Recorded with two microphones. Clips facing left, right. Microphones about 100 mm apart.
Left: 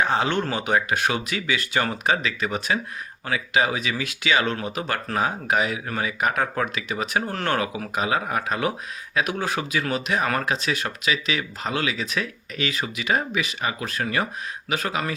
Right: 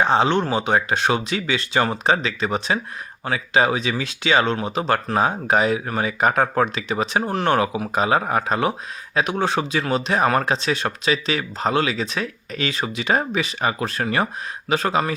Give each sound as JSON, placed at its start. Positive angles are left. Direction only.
{"t": 0.0, "sound": "speech", "side_deg": -30}